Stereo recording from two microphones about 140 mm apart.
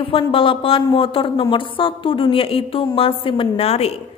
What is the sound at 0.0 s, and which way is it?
A woman's voice, 40° left (ahead or behind).